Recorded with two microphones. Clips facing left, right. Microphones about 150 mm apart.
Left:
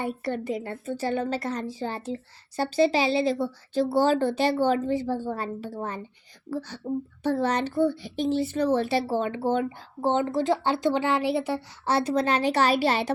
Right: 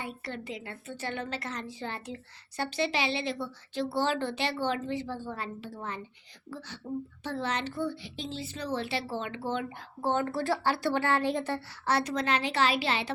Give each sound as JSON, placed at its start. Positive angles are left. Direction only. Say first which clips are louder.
{"t": 0.0, "sound": "a woman's voice", "louder": "left 9 dB", "side_deg": 50}
{"t": 10.0, "sound": "speech", "louder": "left 5 dB", "side_deg": 20}
{"t": 11.9, "sound": "a woman's voice", "louder": "left 5 dB", "side_deg": 30}